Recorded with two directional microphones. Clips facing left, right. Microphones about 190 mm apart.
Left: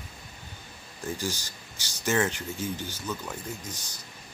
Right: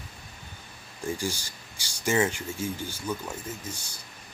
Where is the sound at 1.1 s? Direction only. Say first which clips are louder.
Right 1 dB; 10° right (ahead or behind).